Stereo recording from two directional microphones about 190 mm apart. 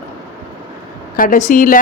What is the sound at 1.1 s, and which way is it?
Speech, 45° left (ahead or behind).